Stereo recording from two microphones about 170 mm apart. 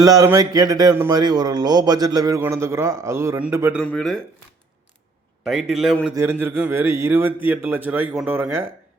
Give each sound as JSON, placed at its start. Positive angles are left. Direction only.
{"t": 0.0, "sound": "speech", "side_deg": -20}
{"t": 3.8, "sound": "a man's voice", "side_deg": 0}
{"t": 5.5, "sound": "a man's voice", "side_deg": 0}
{"t": 6.1, "sound": "a man's voice", "side_deg": -15}